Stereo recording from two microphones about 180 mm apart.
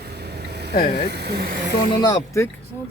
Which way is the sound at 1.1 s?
60° right (ahead or behind).